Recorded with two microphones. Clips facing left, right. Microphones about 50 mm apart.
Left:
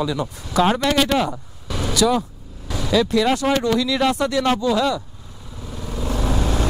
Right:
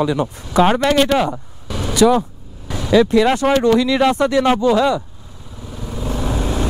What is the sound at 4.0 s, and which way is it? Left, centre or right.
Speech, centre.